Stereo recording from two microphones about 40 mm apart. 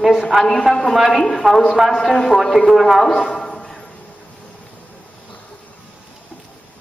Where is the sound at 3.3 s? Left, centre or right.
Centre.